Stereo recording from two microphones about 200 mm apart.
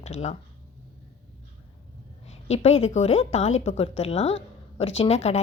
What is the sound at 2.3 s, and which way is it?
A woman's voice, 35° left (ahead or behind).